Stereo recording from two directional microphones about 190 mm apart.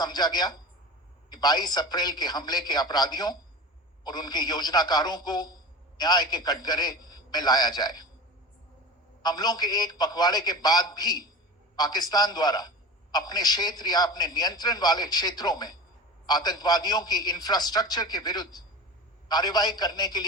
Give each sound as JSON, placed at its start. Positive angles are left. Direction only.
{"t": 0.0, "sound": "a man's voice", "side_deg": 20}
{"t": 9.2, "sound": "a man's voice", "side_deg": 20}